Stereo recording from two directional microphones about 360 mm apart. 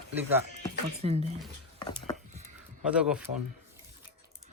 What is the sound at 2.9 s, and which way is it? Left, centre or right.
Speech, centre.